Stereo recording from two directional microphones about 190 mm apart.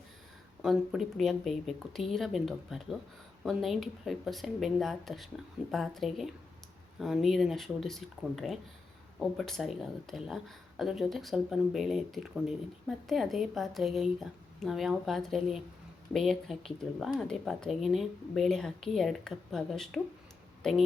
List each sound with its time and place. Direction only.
0.6 s speech: centre (ahead or behind)